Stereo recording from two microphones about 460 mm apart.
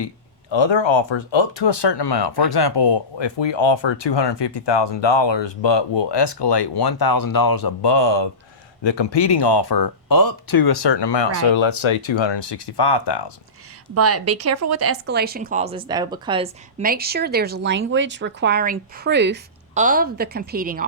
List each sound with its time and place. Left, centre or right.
0.5 s speech: left
13.9 s speech: right